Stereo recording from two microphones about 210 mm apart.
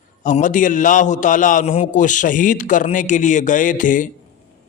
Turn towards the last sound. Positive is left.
turn(degrees=40)  # may be behind; listen again after turning